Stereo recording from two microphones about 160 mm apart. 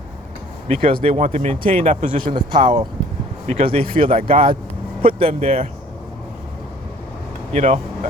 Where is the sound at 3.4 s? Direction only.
40° right (ahead or behind).